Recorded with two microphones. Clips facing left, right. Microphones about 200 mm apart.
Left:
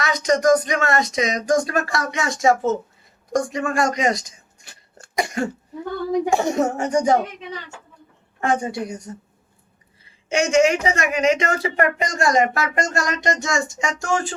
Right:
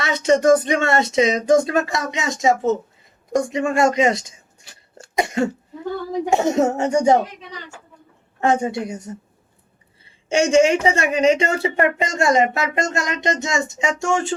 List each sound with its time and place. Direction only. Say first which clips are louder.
0.0 s speech: right 2 dB; 30° right (ahead or behind)
8.4 s speech: right 3 dB; 25° right (ahead or behind)